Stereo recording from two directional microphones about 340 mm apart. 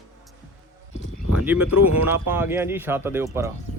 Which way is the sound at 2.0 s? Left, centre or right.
Centre.